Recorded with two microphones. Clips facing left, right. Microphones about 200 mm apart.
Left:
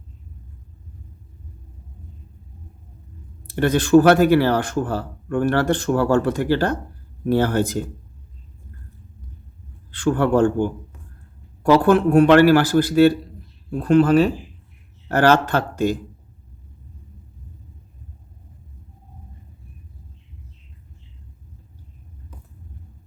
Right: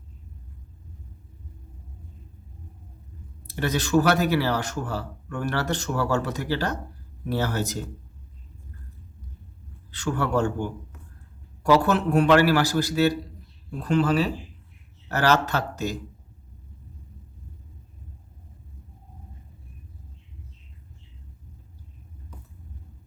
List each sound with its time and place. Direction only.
3.4 s speech: 55° left (ahead or behind)
9.9 s speech: 55° left (ahead or behind)